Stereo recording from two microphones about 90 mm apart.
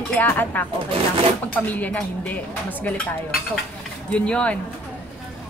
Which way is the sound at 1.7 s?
20° left (ahead or behind).